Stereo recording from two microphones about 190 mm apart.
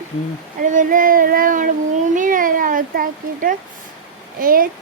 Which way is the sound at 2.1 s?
45° right (ahead or behind).